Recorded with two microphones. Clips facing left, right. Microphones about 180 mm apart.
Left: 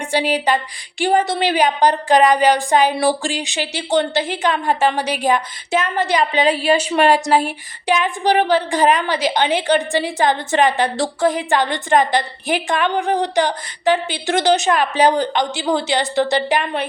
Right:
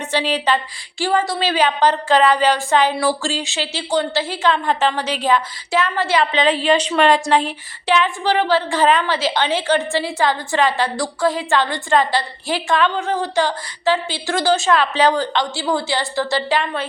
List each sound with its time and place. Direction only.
0.1 s a woman's voice: 10° left (ahead or behind)